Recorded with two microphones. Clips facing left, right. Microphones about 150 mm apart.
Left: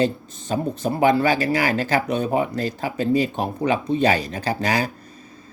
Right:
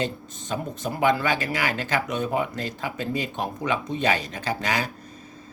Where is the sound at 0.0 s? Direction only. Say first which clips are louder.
Left 7 dB; 35° left (ahead or behind).